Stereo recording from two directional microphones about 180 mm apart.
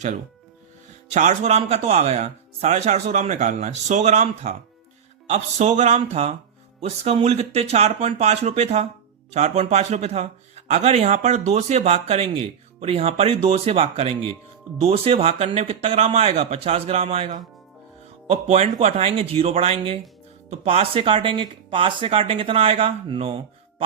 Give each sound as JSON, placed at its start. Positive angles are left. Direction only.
{"t": 1.1, "sound": "speech", "side_deg": -40}